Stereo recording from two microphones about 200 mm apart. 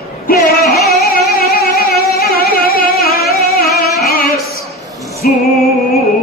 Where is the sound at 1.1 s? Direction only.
50° left (ahead or behind).